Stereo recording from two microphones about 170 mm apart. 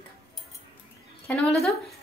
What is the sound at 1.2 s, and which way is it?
Speech, centre (ahead or behind).